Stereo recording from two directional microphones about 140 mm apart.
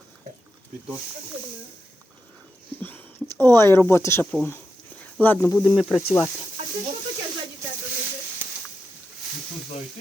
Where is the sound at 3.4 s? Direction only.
20° left (ahead or behind).